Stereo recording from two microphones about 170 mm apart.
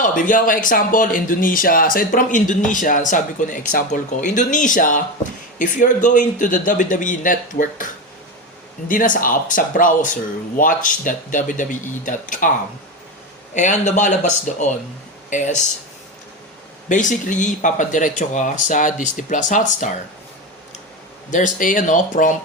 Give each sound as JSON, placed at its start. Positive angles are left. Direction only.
{"t": 0.0, "sound": "speech", "side_deg": 50}
{"t": 8.9, "sound": "speech", "side_deg": 50}
{"t": 13.5, "sound": "speech", "side_deg": 45}
{"t": 16.9, "sound": "speech", "side_deg": 50}
{"t": 21.2, "sound": "speech", "side_deg": 50}